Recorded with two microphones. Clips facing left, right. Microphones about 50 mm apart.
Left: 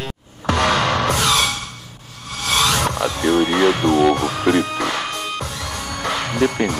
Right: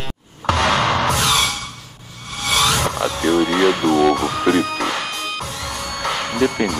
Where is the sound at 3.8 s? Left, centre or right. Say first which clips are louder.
Even; right.